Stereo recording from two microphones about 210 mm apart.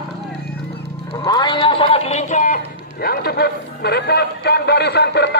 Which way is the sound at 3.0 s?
45° left (ahead or behind).